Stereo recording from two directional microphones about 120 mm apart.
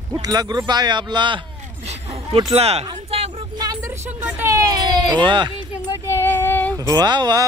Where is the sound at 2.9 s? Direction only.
55° right (ahead or behind).